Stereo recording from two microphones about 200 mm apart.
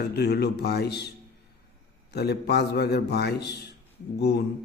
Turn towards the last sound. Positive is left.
turn(degrees=55)  # may be behind; listen again after turning